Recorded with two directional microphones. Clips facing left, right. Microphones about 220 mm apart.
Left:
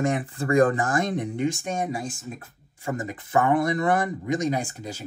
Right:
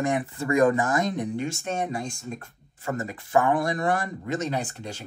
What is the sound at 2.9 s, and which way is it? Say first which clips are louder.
Speech: right 1 dB; 15° left (ahead or behind).